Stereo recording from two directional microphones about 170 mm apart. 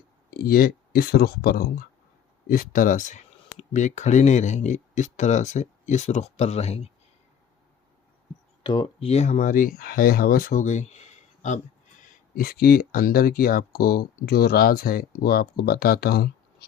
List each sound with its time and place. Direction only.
0.3 s speech: 65° left (ahead or behind); by 6.9 s 40° left (ahead or behind)
8.6 s speech: 30° left (ahead or behind)
12.0 s speech: 60° left (ahead or behind)